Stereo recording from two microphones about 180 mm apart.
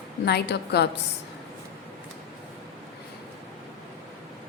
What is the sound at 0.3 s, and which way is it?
Speech, 65° left (ahead or behind).